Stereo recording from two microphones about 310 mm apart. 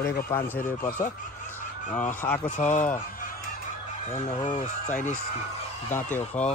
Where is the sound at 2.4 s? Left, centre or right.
Left.